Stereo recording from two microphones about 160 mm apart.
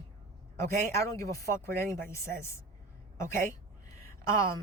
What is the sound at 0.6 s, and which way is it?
Speech, 20° left (ahead or behind).